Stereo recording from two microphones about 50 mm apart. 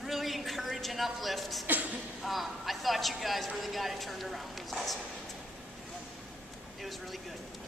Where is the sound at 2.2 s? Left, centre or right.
Centre.